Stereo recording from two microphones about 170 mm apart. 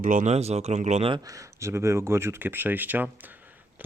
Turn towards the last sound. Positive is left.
turn(degrees=-10)  # may be behind; listen again after turning